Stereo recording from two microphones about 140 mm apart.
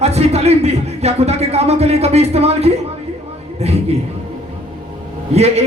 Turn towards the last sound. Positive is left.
turn(degrees=-50)  # may be behind; listen again after turning